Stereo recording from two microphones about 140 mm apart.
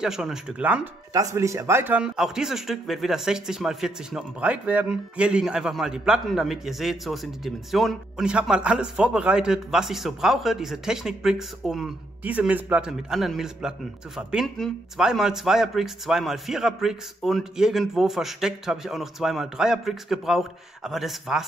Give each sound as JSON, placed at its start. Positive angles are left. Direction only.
{"t": 0.0, "sound": "a man's voice", "side_deg": -5}
{"t": 1.1, "sound": "a man's voice", "side_deg": -20}